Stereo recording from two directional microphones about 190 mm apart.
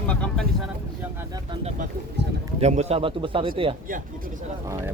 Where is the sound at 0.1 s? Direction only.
5° left (ahead or behind).